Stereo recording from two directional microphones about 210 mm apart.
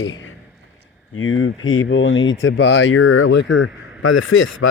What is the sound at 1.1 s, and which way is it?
Speech, 75° left (ahead or behind).